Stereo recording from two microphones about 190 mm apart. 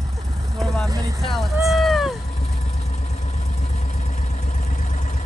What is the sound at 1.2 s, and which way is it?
Speech, centre (ahead or behind).